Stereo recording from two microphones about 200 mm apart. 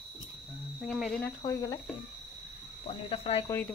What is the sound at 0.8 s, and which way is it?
Speech, centre (ahead or behind).